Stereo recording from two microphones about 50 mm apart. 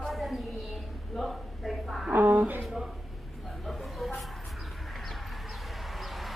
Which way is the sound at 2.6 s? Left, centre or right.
Centre.